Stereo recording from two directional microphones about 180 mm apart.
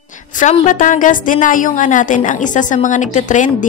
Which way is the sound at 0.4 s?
45° left (ahead or behind).